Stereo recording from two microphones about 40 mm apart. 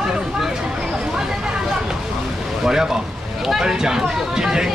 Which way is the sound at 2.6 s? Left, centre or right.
Centre.